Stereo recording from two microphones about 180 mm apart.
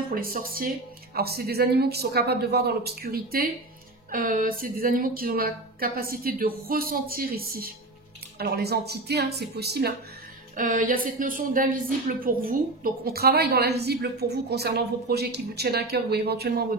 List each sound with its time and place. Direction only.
0.1 s a woman's voice: 55° right (ahead or behind)
10.5 s a woman's voice: 50° right (ahead or behind)